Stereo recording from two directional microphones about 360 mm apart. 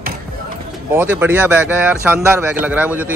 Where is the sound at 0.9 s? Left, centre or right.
Centre.